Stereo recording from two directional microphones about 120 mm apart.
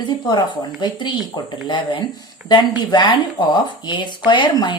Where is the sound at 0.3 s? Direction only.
35° left (ahead or behind).